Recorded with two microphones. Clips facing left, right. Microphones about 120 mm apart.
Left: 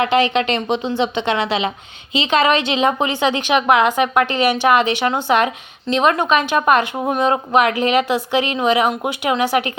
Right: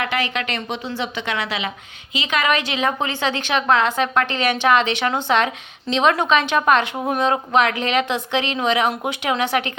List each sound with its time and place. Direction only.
0.0 s a woman's voice: 25° left (ahead or behind); by 9.7 s 5° left (ahead or behind)